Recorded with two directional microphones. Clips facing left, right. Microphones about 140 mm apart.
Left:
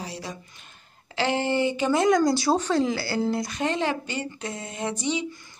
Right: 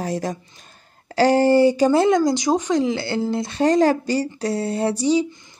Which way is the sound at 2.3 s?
15° right (ahead or behind).